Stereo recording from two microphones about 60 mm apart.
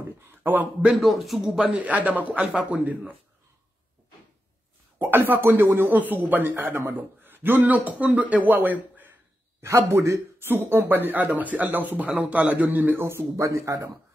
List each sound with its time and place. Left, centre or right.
0.3 s speech: right
0.9 s a man's voice: centre
1.6 s a man's voice: right
4.9 s a man's voice: right
9.6 s a man's voice: right
13.0 s speech: right